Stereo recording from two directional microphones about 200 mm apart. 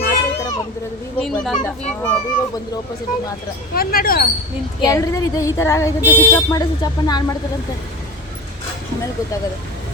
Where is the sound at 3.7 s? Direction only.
45° left (ahead or behind).